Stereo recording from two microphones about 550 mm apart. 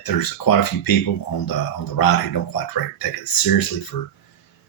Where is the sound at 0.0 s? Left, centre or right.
Left.